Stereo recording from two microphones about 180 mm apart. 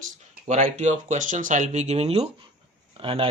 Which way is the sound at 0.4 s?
40° right (ahead or behind).